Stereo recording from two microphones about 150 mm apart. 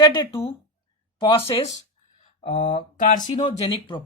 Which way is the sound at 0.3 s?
40° left (ahead or behind).